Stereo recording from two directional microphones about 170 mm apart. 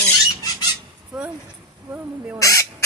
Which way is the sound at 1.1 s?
5° right (ahead or behind).